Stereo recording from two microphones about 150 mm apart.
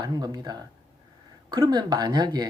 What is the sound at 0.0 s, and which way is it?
A man's voice, 25° right (ahead or behind).